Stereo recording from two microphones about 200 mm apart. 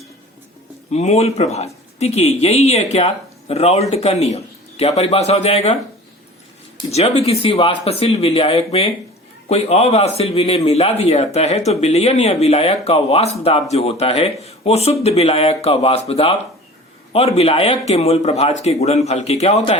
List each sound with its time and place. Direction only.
0.9 s a man's voice: 35° left (ahead or behind)
7.2 s a man's voice: 30° left (ahead or behind)